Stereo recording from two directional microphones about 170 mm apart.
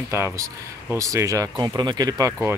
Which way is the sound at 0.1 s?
15° right (ahead or behind).